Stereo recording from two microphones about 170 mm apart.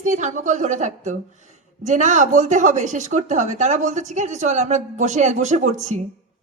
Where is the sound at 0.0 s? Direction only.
45° right (ahead or behind).